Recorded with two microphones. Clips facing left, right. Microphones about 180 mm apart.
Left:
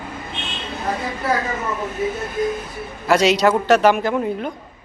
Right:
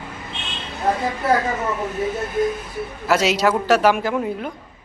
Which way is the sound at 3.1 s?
5° right (ahead or behind).